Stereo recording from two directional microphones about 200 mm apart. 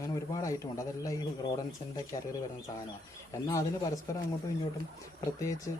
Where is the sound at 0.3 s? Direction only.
15° left (ahead or behind).